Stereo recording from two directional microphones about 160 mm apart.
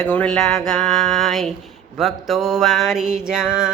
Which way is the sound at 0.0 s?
5° left (ahead or behind).